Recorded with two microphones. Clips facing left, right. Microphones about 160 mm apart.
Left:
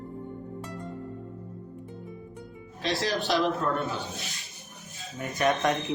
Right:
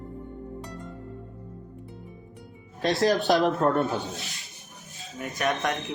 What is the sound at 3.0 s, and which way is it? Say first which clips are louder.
Speech: right 5 dB; 45° right (ahead or behind).